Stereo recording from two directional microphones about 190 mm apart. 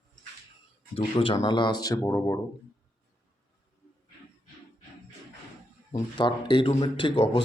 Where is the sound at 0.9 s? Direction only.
30° left (ahead or behind).